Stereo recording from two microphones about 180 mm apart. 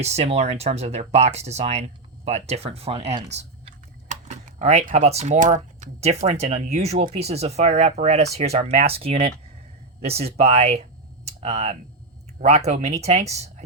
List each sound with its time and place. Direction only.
0.0 s speech: 35° right (ahead or behind)